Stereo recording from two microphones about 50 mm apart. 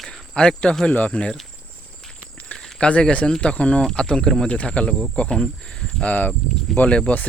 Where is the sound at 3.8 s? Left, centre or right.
Centre.